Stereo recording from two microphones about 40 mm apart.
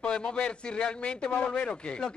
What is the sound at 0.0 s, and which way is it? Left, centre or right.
A woman's voice, left.